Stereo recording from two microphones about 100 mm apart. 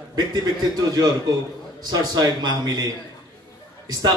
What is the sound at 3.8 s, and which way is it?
Speech, 45° right (ahead or behind).